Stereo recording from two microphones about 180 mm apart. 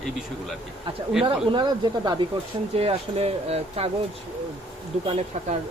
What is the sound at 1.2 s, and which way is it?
Speech, 25° right (ahead or behind).